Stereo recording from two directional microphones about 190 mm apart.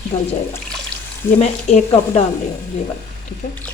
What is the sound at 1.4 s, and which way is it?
Speech, 35° left (ahead or behind).